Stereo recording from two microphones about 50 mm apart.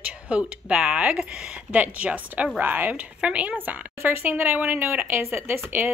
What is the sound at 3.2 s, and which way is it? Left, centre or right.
Speech, right.